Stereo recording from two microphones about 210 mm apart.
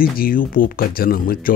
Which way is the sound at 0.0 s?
45° left (ahead or behind).